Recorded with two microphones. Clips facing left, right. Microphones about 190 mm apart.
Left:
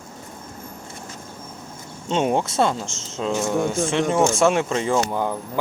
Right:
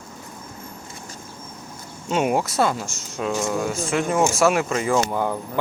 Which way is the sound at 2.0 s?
25° left (ahead or behind).